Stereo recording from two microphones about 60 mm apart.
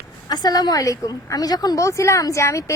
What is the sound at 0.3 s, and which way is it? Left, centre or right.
A woman's voice, left.